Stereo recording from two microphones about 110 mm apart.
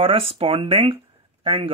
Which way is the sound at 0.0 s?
60° right (ahead or behind).